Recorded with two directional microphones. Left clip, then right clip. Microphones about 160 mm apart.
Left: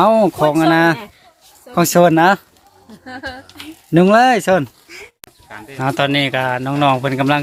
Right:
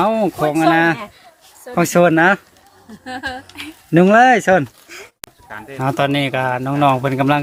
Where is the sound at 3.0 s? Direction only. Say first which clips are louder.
Right 3 dB; 90° right.